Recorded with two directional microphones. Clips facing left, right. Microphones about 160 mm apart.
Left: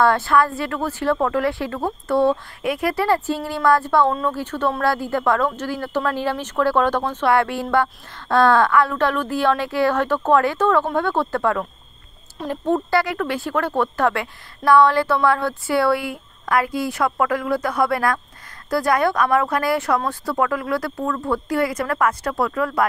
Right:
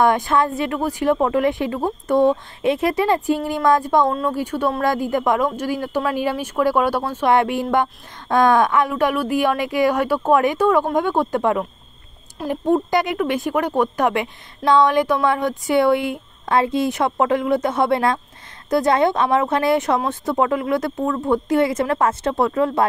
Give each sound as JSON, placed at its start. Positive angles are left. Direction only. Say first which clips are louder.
{"t": 0.0, "sound": "speech", "louder": "even", "side_deg": -15}